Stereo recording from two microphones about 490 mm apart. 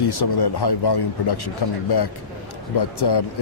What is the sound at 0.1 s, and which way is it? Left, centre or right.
Speech, left.